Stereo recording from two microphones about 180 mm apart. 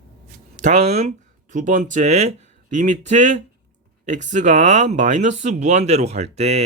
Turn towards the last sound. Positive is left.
turn(degrees=-35)  # may be behind; listen again after turning